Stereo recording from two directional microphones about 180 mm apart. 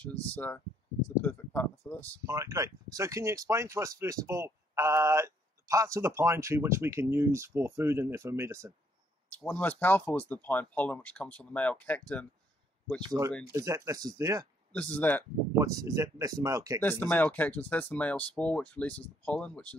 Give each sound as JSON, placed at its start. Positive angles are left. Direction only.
{"t": 0.0, "sound": "speech", "side_deg": 10}
{"t": 2.2, "sound": "speech", "side_deg": -15}
{"t": 9.3, "sound": "speech", "side_deg": 10}
{"t": 13.0, "sound": "speech", "side_deg": -20}
{"t": 14.7, "sound": "speech", "side_deg": 10}
{"t": 15.6, "sound": "speech", "side_deg": -20}
{"t": 16.8, "sound": "speech", "side_deg": 10}